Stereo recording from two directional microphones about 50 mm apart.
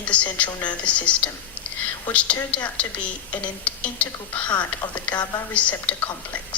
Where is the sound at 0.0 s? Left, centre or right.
Left.